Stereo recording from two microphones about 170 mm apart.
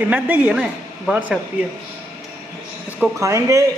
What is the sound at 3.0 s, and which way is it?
Speech, 15° right (ahead or behind).